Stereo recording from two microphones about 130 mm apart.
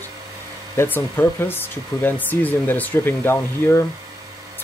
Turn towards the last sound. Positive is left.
turn(degrees=15)  # may be behind; listen again after turning